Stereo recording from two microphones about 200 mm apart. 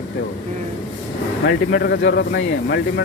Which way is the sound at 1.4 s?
55° left (ahead or behind).